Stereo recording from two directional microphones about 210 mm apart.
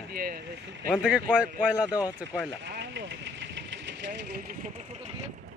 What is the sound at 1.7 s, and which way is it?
Speech, 15° left (ahead or behind).